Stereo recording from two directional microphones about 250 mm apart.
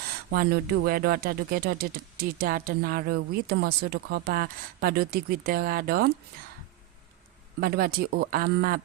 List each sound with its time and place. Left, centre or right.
0.3 s speech: right
7.6 s speech: right